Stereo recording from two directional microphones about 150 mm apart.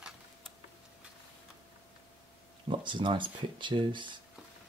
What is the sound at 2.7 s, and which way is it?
Speech, 30° right (ahead or behind).